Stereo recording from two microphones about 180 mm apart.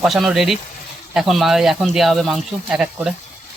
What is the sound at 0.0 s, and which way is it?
Speech, centre (ahead or behind).